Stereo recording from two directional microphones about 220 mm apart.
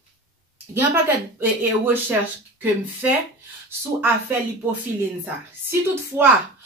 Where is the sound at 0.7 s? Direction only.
10° right (ahead or behind).